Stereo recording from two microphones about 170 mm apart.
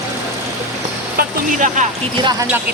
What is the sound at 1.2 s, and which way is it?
Music, 50° right (ahead or behind).